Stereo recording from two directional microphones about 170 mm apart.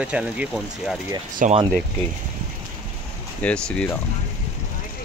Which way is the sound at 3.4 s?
5° left (ahead or behind).